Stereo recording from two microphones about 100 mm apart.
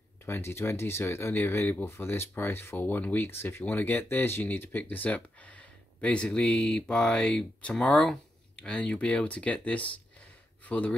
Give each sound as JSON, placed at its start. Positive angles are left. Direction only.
{"t": 0.2, "sound": "speech", "side_deg": 25}